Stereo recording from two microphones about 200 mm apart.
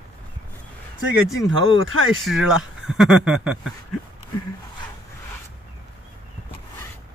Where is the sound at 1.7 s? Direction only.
80° right.